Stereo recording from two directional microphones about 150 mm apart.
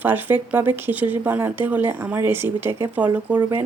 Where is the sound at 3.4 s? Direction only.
20° right (ahead or behind).